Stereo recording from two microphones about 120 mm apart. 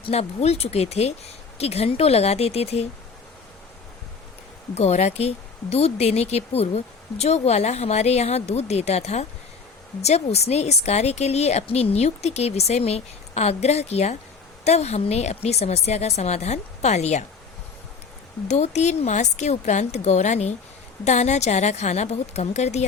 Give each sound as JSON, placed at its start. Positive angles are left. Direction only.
{"t": 0.0, "sound": "a woman's voice", "side_deg": 60}
{"t": 4.7, "sound": "a woman's voice", "side_deg": 60}
{"t": 18.4, "sound": "speech", "side_deg": 70}